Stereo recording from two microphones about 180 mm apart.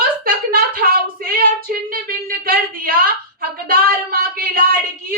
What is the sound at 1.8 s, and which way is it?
Speech, 55° right (ahead or behind).